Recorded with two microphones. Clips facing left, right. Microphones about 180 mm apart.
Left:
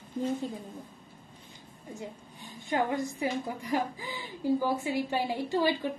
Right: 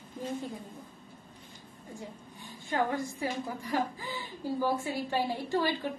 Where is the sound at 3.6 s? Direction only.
15° left (ahead or behind).